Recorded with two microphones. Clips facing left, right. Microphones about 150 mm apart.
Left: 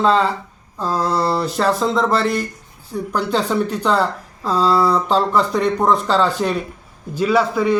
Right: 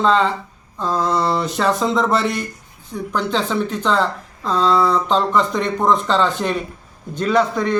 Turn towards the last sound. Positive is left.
turn(degrees=5)  # may be behind; listen again after turning